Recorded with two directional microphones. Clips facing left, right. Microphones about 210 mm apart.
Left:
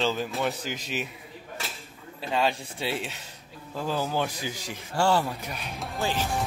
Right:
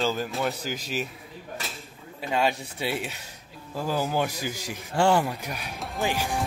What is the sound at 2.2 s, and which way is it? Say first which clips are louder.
Speech: right 1 dB; 10° right (ahead or behind).